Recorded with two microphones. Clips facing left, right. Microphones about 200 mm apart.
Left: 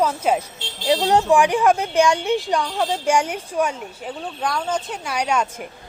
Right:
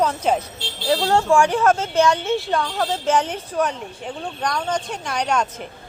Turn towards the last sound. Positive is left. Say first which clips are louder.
# even
turn(degrees=10)  # may be behind; listen again after turning